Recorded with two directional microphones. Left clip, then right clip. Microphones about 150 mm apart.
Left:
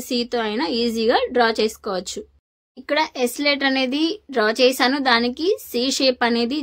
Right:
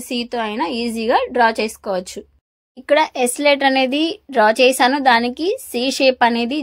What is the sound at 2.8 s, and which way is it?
A woman's voice, 30° right (ahead or behind).